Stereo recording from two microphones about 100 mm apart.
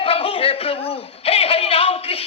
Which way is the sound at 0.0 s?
70° left (ahead or behind).